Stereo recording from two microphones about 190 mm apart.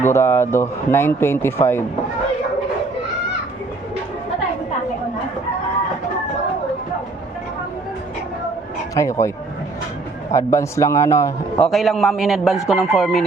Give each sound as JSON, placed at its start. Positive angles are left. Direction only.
{"t": 0.0, "sound": "speech", "side_deg": 10}
{"t": 9.0, "sound": "speech", "side_deg": 15}
{"t": 10.3, "sound": "speech", "side_deg": 15}
{"t": 11.7, "sound": "a man's voice", "side_deg": 0}